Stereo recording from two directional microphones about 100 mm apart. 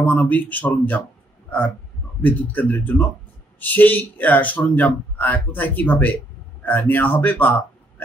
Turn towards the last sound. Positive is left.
turn(degrees=15)  # may be behind; listen again after turning